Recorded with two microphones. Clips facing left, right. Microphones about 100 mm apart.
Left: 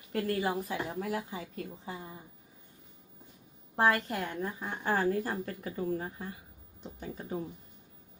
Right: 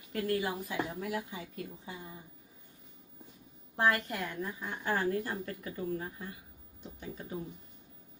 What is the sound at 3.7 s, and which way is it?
A woman's voice, 35° left (ahead or behind).